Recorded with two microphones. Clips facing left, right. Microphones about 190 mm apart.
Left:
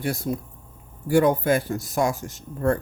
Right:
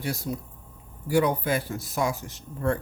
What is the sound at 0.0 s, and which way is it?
Speech, 55° left (ahead or behind).